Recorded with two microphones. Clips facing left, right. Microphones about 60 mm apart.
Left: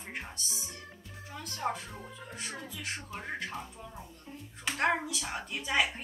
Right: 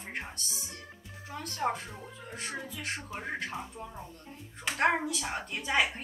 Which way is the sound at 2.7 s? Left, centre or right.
Centre.